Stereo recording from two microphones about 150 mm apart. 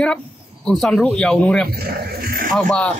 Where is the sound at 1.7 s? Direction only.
90° right.